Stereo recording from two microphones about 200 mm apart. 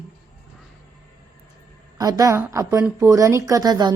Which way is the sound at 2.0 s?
15° right (ahead or behind).